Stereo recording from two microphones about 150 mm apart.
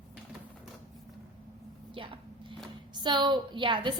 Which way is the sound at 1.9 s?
35° right (ahead or behind).